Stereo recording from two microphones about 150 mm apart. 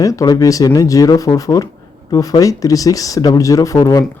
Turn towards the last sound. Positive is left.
turn(degrees=25)  # may be behind; listen again after turning